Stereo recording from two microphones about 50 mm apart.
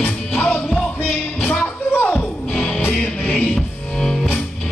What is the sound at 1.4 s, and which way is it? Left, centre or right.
Music, left.